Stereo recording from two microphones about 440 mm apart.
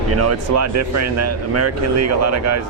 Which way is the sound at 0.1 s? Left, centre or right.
Right.